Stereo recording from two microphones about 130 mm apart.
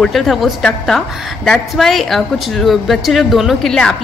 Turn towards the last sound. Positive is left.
turn(degrees=5)  # may be behind; listen again after turning